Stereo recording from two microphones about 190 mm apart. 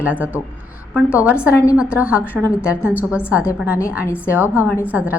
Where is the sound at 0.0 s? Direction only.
10° right (ahead or behind).